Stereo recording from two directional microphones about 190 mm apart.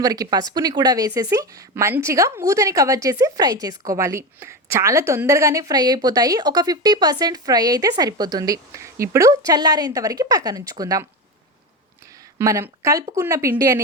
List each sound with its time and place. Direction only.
0.0 s speech: 20° right (ahead or behind)
12.4 s speech: 15° right (ahead or behind)